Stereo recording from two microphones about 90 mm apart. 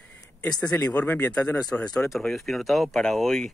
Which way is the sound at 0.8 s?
20° left (ahead or behind).